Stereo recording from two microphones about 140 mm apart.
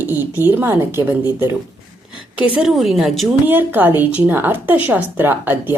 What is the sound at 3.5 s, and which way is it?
Speech, 15° right (ahead or behind).